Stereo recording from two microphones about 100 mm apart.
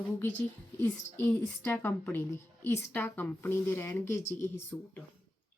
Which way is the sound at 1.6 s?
20° left (ahead or behind).